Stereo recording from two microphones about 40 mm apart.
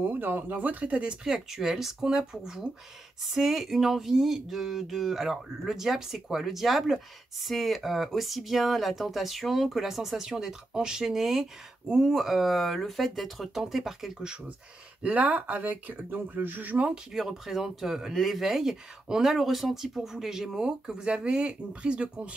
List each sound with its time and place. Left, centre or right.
0.0 s speech: right
1.2 s speech: centre
15.0 s speech: right
17.1 s speech: centre; by 22.3 s right